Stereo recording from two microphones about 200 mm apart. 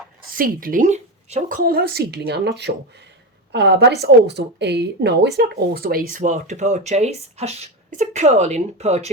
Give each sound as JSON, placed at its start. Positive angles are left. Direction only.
{"t": 0.3, "sound": "a woman's voice", "side_deg": -45}